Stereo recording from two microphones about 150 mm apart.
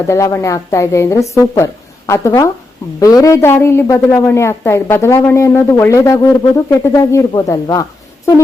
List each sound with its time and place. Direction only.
0.1 s a woman's voice: 20° left (ahead or behind)